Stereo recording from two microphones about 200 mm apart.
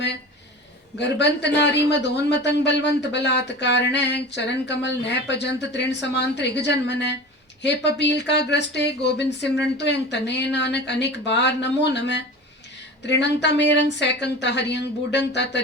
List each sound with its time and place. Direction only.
0.9 s a man's voice: 60° left (ahead or behind)